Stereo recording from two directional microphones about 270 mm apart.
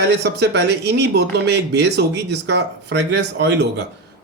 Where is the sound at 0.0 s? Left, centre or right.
Right.